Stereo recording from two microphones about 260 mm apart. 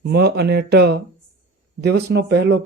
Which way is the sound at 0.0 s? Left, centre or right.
Right.